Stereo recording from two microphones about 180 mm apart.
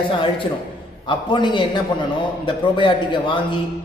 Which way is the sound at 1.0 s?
25° left (ahead or behind).